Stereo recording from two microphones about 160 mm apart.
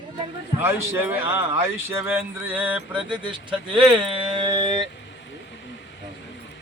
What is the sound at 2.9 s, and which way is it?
Speech, 30° right (ahead or behind).